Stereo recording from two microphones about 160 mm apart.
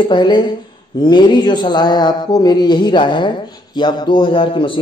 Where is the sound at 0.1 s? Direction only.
30° left (ahead or behind).